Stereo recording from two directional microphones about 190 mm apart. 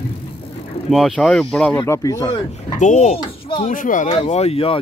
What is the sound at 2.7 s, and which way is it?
Speech, 40° left (ahead or behind).